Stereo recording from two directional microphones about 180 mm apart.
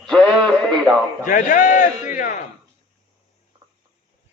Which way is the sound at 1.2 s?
45° left (ahead or behind).